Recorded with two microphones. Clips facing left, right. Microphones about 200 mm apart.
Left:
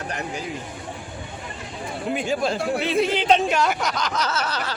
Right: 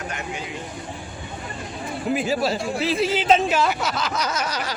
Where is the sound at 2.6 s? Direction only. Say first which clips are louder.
Left 2 dB; 60° left (ahead or behind).